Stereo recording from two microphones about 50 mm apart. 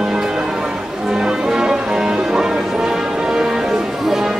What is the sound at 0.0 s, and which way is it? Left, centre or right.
Music, centre.